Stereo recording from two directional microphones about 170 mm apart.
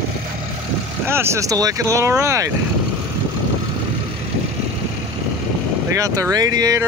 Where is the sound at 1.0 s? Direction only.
15° right (ahead or behind).